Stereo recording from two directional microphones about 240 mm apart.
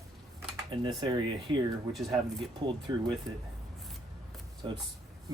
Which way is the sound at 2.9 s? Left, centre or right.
Centre.